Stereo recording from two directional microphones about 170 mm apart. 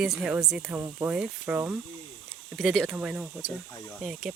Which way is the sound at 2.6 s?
Centre (ahead or behind).